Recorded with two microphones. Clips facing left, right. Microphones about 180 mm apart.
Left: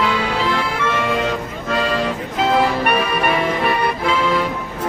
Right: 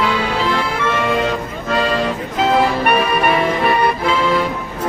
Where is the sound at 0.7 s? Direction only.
35° right (ahead or behind).